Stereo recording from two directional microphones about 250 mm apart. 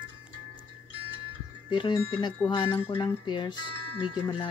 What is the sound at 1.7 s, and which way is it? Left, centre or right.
Speech, centre.